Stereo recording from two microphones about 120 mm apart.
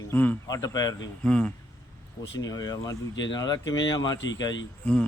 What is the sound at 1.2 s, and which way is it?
Speech, 10° left (ahead or behind).